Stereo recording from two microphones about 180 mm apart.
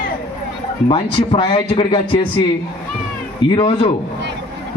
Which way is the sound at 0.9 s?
30° left (ahead or behind).